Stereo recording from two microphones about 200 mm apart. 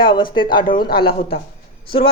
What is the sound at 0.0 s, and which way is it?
Speech, 25° left (ahead or behind).